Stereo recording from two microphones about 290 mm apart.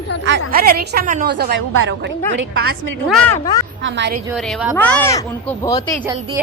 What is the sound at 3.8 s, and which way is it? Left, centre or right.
Speech, right.